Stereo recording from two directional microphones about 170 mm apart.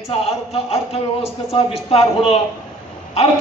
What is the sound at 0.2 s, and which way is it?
A man's voice, 35° left (ahead or behind).